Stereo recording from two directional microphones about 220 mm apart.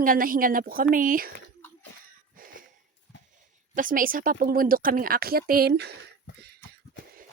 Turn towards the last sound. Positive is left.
turn(degrees=-50)  # may be behind; listen again after turning